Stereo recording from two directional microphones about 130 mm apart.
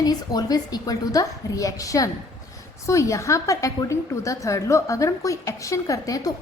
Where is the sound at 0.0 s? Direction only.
30° left (ahead or behind).